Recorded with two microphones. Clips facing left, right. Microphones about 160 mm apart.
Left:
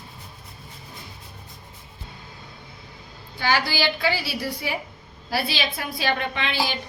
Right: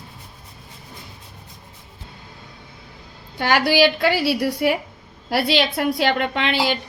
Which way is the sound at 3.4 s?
65° right (ahead or behind).